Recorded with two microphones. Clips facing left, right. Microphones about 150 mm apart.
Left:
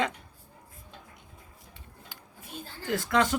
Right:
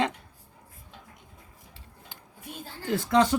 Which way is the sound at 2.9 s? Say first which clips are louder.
Right 3 dB; 25° right (ahead or behind).